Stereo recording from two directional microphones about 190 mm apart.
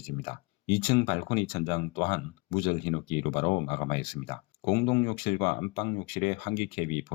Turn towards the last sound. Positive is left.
turn(degrees=30)  # may be behind; listen again after turning